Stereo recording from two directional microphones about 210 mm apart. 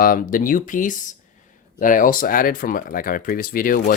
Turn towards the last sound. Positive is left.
turn(degrees=40)  # may be behind; listen again after turning